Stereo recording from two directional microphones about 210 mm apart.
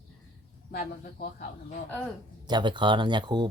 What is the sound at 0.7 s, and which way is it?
Speech, 45° left (ahead or behind).